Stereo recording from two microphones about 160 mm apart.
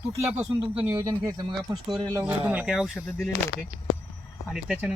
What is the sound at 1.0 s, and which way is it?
Speech, 25° right (ahead or behind).